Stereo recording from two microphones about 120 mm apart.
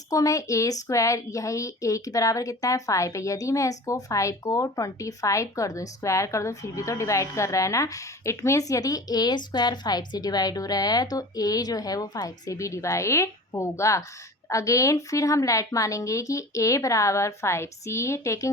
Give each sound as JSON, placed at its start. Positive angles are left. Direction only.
{"t": 0.1, "sound": "a woman's voice", "side_deg": 30}